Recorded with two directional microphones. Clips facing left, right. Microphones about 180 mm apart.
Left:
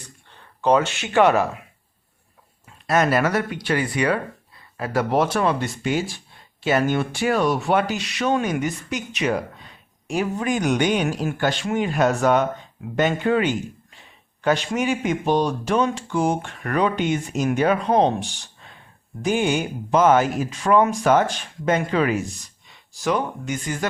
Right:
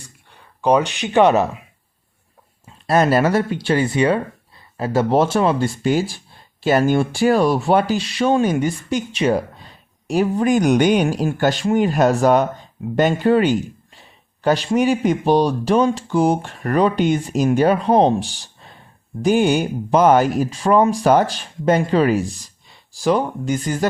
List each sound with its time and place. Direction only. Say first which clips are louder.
0.0 s speech: even; 10° right (ahead or behind)
2.6 s speech: right 4 dB; 30° right (ahead or behind)